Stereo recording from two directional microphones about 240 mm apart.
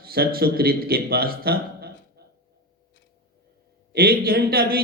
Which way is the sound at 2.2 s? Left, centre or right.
Right.